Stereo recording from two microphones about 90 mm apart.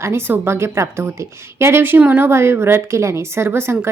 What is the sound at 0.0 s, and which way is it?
A woman's voice, 30° right (ahead or behind).